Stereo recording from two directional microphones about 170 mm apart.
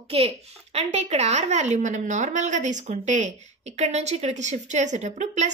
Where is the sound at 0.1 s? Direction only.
35° right (ahead or behind).